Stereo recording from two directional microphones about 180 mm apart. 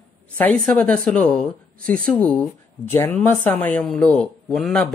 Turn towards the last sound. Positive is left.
turn(degrees=5)  # may be behind; listen again after turning